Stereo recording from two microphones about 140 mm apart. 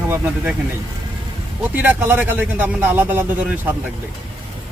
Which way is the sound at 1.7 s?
15° right (ahead or behind).